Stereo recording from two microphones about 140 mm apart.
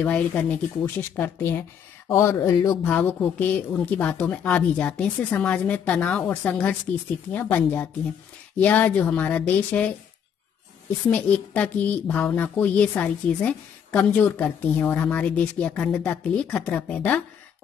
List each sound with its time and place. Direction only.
0.0 s a woman's voice: 10° left (ahead or behind)
2.8 s a woman's voice: 15° left (ahead or behind)
11.1 s a woman's voice: 10° left (ahead or behind)